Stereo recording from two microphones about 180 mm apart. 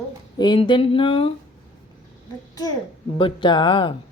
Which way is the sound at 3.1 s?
25° left (ahead or behind).